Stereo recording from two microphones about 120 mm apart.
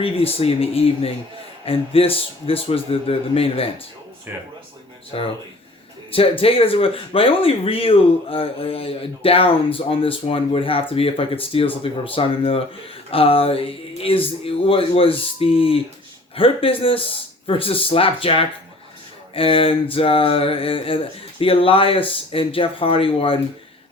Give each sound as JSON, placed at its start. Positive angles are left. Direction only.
{"t": 0.0, "sound": "speech", "side_deg": 55}
{"t": 4.3, "sound": "speech", "side_deg": -20}
{"t": 5.1, "sound": "speech", "side_deg": 45}